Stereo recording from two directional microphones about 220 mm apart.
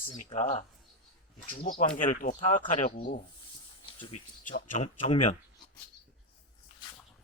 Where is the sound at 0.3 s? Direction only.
30° left (ahead or behind).